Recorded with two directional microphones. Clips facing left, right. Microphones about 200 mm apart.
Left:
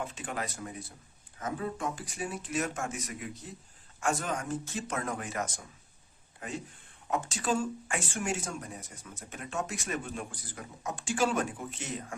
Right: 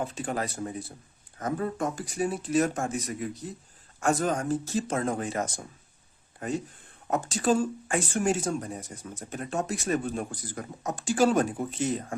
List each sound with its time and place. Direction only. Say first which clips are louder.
0.0 s speech: right 6 dB; 35° right (ahead or behind)
1.4 s speech: right 5 dB; 45° right (ahead or behind)